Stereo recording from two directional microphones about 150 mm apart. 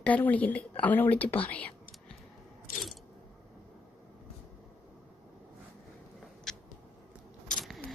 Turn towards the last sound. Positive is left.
turn(degrees=5)  # may be behind; listen again after turning